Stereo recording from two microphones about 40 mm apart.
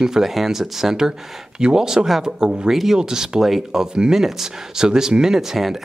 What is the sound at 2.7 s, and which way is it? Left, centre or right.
Speech, centre.